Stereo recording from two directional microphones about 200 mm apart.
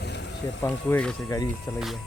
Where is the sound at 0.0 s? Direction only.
60° left (ahead or behind).